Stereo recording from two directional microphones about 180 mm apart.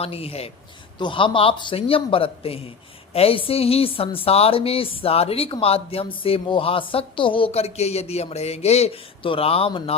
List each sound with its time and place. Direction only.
0.0 s a woman's voice: 30° left (ahead or behind)